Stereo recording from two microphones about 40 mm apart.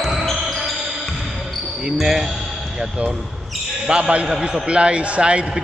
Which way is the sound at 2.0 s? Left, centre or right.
Centre.